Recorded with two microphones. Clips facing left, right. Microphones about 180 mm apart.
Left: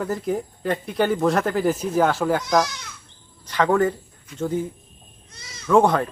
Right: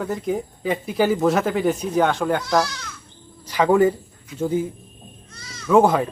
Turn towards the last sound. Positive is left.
turn(degrees=-5)  # may be behind; listen again after turning